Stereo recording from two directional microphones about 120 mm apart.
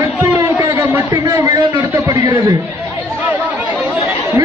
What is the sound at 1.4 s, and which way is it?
Speech, 25° right (ahead or behind).